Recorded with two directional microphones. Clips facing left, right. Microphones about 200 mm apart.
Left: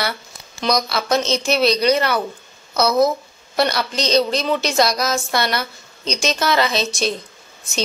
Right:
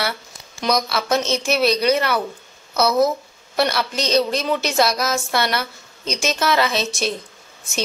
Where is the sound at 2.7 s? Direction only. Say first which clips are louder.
Left 1 dB; 15° left (ahead or behind).